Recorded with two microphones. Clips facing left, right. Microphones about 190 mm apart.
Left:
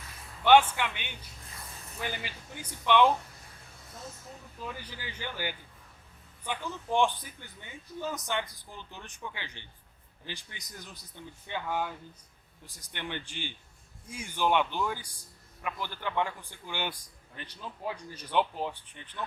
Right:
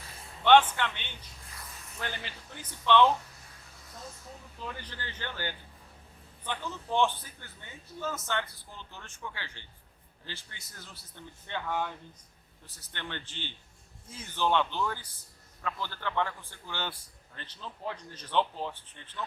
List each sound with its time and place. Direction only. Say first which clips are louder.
0.4 s a man's voice: even; 10° left (ahead or behind)
4.6 s a man's voice: even; 10° left (ahead or behind)